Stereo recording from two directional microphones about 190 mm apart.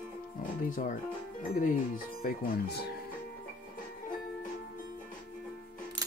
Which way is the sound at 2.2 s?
55° left (ahead or behind).